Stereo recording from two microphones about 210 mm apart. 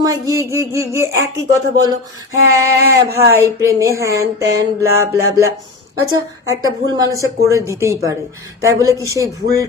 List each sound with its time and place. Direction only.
0.0 s speech: 15° right (ahead or behind)